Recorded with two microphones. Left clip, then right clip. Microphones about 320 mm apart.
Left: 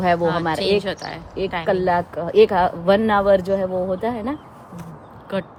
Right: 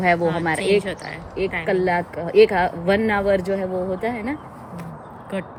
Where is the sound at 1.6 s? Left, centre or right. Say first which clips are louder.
Left 2 dB; centre.